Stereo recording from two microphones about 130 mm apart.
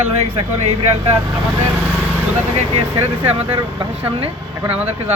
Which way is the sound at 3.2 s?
50° right (ahead or behind).